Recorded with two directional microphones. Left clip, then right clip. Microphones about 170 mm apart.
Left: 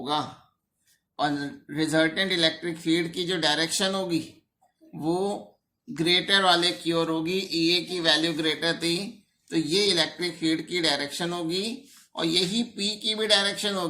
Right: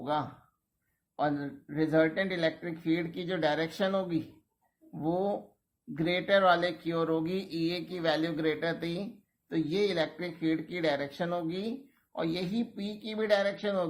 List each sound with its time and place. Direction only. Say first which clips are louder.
0.0 s speech: left 4 dB; 30° right (ahead or behind)